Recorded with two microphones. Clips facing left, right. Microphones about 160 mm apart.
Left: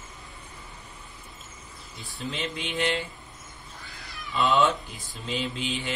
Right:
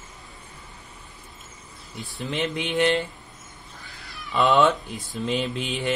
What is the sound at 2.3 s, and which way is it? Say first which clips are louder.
Mantra: right 8 dB; 55° right (ahead or behind).